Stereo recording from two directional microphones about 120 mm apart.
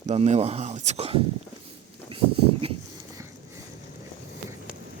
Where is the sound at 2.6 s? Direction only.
55° right (ahead or behind).